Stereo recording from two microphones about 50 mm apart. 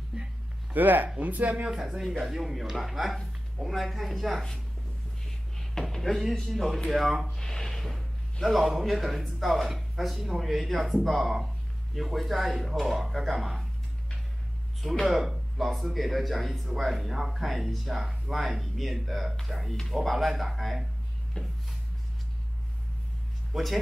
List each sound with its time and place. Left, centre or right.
0.1 s speech: centre
0.7 s speech: right
1.6 s speech: centre
5.6 s speech: centre
7.3 s a sound: centre
8.5 s speech: centre
14.8 s speech: centre
21.4 s a sound: centre
23.5 s speech: centre